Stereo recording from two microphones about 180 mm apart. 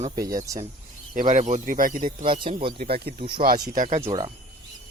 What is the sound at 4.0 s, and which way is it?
Speech, 20° right (ahead or behind).